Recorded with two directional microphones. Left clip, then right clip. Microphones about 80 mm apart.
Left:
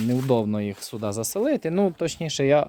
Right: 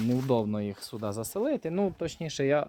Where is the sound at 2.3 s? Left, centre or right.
Left.